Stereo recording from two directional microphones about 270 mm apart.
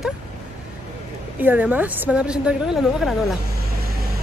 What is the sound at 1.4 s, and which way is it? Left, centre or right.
A woman's voice, centre.